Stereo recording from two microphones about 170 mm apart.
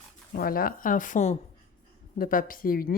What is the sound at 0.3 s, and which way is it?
A woman's voice, 60° left (ahead or behind).